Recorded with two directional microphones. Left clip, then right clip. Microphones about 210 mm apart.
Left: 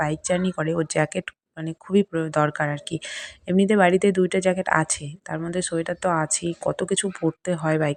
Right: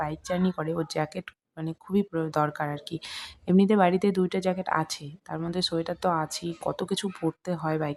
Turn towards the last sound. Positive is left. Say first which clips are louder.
# left 6 dB
turn(degrees=15)  # may be behind; listen again after turning